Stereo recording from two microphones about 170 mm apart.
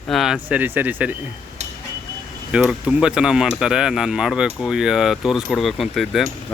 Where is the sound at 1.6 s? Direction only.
40° right (ahead or behind).